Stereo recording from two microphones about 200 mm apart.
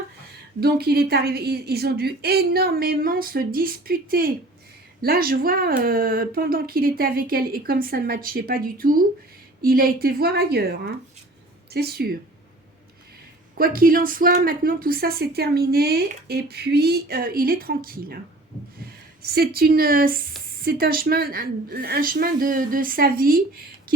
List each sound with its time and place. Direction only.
0.6 s a woman's voice: 50° right (ahead or behind)
13.6 s a woman's voice: 45° right (ahead or behind)